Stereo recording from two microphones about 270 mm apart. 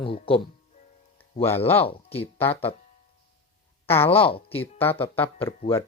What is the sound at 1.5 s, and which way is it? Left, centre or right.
Speech, centre.